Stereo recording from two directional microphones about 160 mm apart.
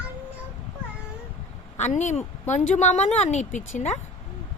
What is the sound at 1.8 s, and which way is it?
A woman's voice, 45° left (ahead or behind).